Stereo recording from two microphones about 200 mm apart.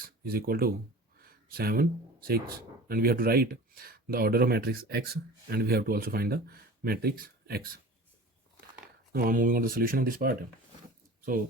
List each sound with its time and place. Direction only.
0.0 s speech: 45° right (ahead or behind)
9.1 s speech: 45° right (ahead or behind)